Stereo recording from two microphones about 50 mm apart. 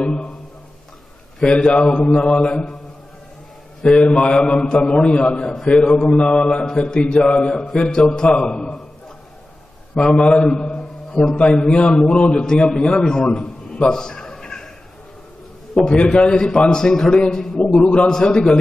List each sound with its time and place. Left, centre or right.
0.0 s a man's voice: centre
1.4 s a man's voice: centre
3.9 s a man's voice: left
5.5 s a man's voice: centre
7.5 s a man's voice: centre
10.0 s a man's voice: left
13.9 s a sound: centre
15.7 s a man's voice: centre